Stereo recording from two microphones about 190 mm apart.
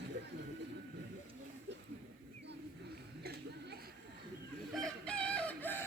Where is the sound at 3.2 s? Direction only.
55° right (ahead or behind).